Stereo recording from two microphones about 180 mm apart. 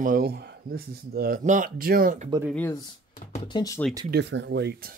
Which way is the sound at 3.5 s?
20° left (ahead or behind).